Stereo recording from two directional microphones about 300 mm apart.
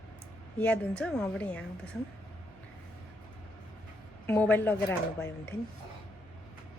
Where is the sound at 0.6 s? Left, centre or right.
Centre.